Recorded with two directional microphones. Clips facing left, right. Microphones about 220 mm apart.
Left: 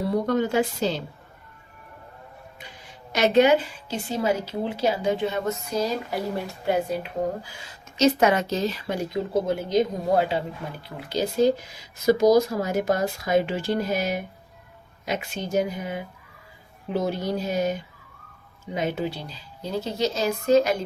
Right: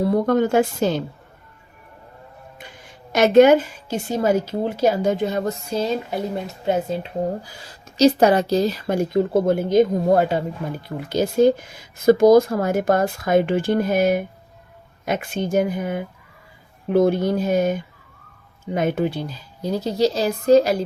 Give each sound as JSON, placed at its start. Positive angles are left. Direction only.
{"t": 0.1, "sound": "a woman's voice", "side_deg": -50}
{"t": 3.1, "sound": "a woman's voice", "side_deg": -45}
{"t": 7.6, "sound": "a woman's voice", "side_deg": -35}